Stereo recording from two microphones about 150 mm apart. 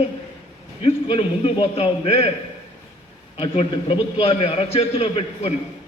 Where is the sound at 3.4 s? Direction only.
35° left (ahead or behind).